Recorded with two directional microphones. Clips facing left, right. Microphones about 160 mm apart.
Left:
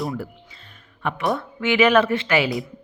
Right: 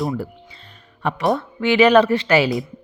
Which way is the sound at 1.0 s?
35° right (ahead or behind).